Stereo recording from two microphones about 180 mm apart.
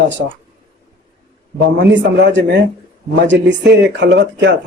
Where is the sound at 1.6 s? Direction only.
75° right (ahead or behind).